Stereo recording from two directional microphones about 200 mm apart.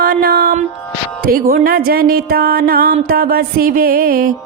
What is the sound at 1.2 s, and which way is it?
Music, 45° right (ahead or behind).